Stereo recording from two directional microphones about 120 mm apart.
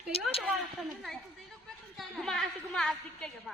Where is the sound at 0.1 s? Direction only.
55° left (ahead or behind).